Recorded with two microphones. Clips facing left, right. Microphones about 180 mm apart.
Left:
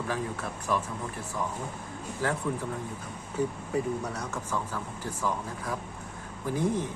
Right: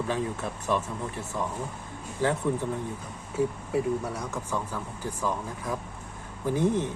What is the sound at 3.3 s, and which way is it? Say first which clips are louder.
Speech: right 2 dB; 10° right (ahead or behind).